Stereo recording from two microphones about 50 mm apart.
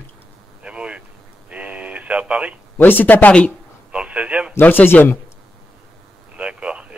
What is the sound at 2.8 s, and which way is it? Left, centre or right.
Speech, left.